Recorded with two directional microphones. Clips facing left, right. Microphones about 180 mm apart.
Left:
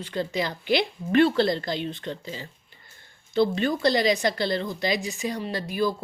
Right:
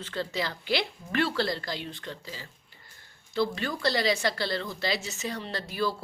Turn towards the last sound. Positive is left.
turn(degrees=15)  # may be behind; listen again after turning